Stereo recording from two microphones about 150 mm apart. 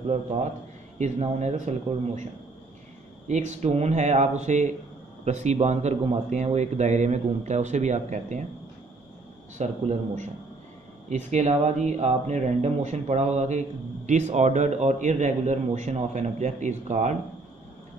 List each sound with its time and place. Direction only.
0.9 s speech: 50° right (ahead or behind)
3.3 s speech: 50° right (ahead or behind)
9.6 s speech: 50° right (ahead or behind)